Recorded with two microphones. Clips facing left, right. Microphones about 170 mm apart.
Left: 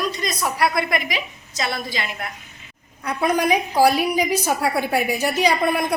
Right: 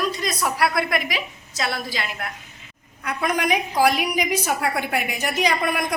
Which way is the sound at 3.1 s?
30° left (ahead or behind).